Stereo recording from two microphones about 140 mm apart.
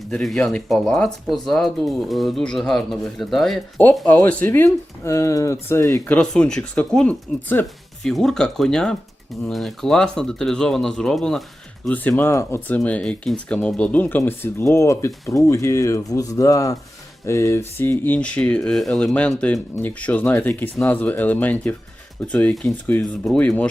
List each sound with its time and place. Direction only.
0.1 s speech: 5° left (ahead or behind); by 6.1 s 20° left (ahead or behind)
6.1 s speech: 5° left (ahead or behind)
8.0 s speech: centre (ahead or behind)